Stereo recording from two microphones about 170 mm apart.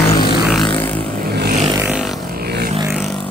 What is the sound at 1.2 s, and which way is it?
Vehicle, 65° right (ahead or behind).